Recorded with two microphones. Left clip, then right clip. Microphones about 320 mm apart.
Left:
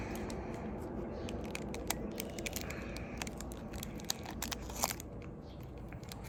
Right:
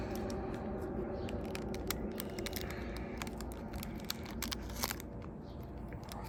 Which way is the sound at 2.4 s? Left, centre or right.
Centre.